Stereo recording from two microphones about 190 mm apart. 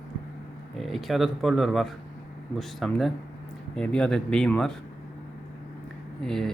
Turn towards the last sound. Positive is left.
turn(degrees=0)  # may be behind; listen again after turning